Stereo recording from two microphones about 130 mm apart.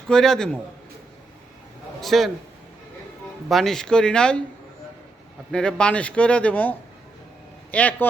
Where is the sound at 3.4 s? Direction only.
Centre (ahead or behind).